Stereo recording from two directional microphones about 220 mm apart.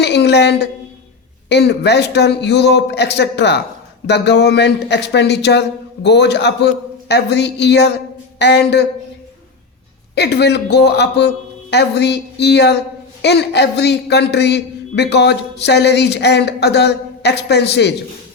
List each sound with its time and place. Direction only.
0.0 s a woman's voice: 50° left (ahead or behind)
10.2 s a man's voice: 50° left (ahead or behind)